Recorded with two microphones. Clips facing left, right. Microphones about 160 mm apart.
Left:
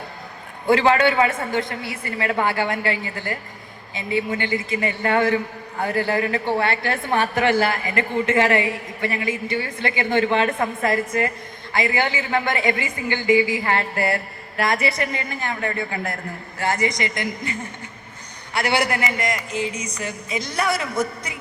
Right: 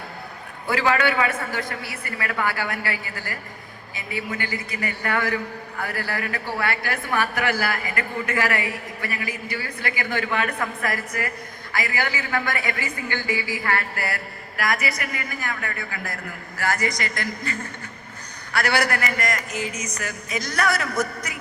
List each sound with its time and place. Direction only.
0.7 s a man's voice: 25° left (ahead or behind)